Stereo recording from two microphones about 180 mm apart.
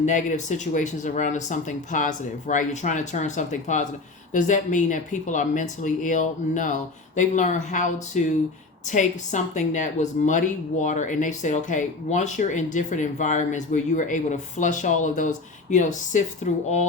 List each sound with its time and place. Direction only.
0.0 s speech: 45° left (ahead or behind)